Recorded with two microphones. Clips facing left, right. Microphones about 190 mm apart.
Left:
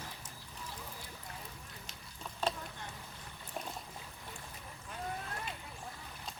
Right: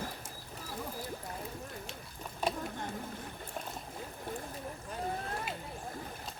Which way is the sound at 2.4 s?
15° right (ahead or behind).